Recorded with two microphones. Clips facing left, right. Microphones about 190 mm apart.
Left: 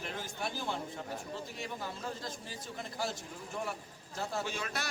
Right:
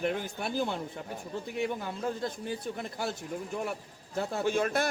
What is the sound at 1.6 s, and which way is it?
A man's voice, 60° right (ahead or behind).